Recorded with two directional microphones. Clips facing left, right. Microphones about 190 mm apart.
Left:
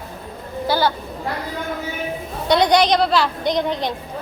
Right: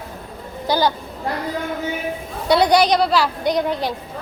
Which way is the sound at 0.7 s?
15° right (ahead or behind).